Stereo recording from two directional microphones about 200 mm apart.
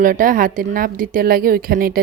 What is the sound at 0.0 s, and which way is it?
Speech, 45° right (ahead or behind).